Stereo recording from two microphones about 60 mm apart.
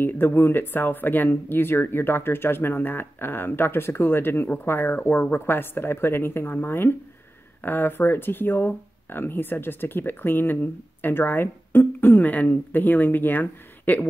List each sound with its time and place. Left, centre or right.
0.0 s speech: left